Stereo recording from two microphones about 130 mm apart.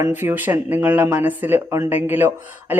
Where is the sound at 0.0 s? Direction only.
20° right (ahead or behind).